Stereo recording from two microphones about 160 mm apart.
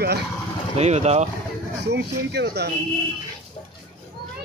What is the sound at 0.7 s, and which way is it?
Speech, 45° right (ahead or behind).